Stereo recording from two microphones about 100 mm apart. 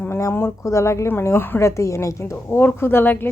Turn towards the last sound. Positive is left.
turn(degrees=20)  # may be behind; listen again after turning